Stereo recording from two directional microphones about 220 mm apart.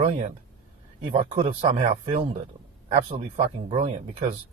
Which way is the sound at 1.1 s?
25° right (ahead or behind).